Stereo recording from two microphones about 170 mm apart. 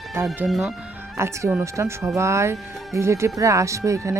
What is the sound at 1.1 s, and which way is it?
Speech, 15° right (ahead or behind).